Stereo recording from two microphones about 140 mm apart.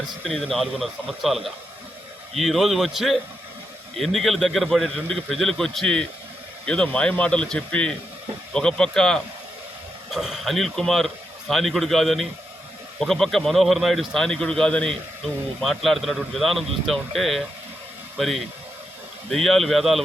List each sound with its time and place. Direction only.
0.3 s a man's voice: centre (ahead or behind)